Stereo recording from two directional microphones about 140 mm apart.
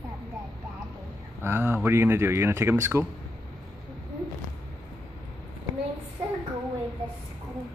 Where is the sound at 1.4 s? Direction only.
15° right (ahead or behind).